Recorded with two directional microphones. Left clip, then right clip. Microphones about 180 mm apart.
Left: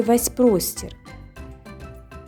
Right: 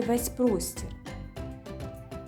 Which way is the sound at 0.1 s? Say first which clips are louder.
Left 10 dB; 35° left (ahead or behind).